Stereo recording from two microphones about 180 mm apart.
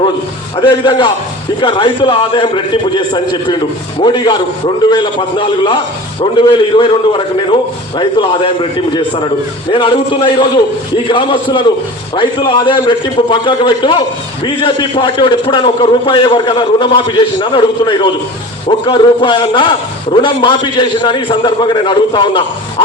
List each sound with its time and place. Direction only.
0.5 s a man's voice: 25° left (ahead or behind)